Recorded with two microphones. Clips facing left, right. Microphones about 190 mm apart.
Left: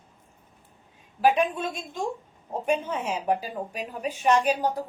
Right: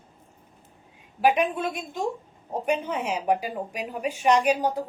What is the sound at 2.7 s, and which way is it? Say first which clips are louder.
A woman's voice: even; 15° right (ahead or behind).